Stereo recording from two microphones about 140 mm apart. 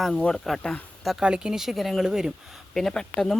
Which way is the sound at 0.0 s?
5° left (ahead or behind).